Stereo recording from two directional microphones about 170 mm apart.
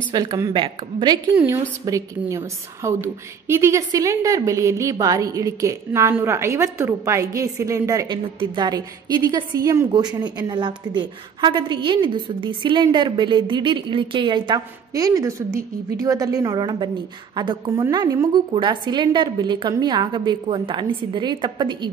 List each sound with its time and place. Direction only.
0.1 s a woman's voice: 20° right (ahead or behind)